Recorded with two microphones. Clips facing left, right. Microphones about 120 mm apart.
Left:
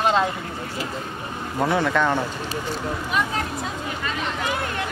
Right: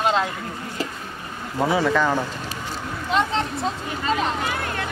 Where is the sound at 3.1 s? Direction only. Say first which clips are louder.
Right 5 dB; 25° right (ahead or behind).